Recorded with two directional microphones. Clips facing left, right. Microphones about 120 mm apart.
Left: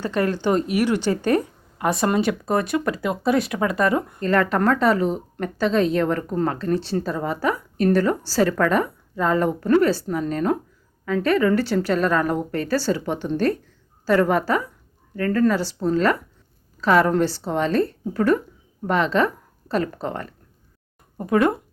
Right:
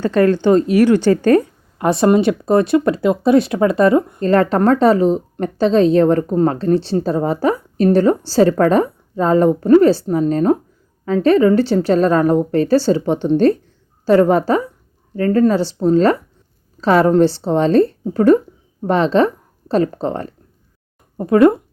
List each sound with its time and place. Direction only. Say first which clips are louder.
1.8 s speech: right 7 dB; 25° right (ahead or behind)